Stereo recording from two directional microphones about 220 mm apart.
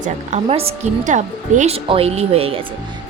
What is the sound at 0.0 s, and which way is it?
Speech, 30° right (ahead or behind).